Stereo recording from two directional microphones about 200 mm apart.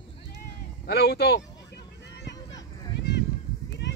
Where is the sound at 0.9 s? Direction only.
55° left (ahead or behind).